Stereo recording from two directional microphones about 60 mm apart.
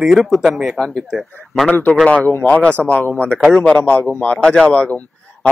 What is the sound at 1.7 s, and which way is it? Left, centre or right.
Speech, left.